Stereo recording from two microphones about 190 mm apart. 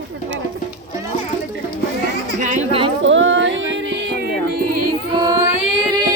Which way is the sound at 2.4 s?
35° right (ahead or behind).